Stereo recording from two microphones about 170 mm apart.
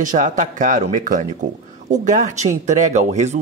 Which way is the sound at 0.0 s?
50° right (ahead or behind).